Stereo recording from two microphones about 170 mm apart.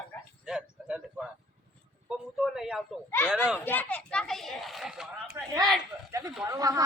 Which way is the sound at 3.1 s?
10° left (ahead or behind).